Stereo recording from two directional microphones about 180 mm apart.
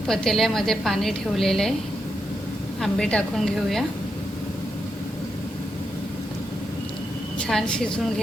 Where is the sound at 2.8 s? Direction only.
Centre (ahead or behind).